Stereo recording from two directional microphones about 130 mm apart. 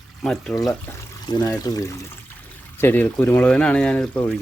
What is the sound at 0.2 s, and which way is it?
Speech, 5° left (ahead or behind).